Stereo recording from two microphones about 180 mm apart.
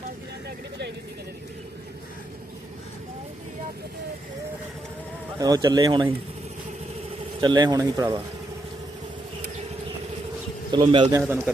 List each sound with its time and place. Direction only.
5.4 s speech: 20° right (ahead or behind)
7.4 s speech: 25° right (ahead or behind)
10.7 s speech: 25° right (ahead or behind)
11.3 s a man's voice: 10° right (ahead or behind)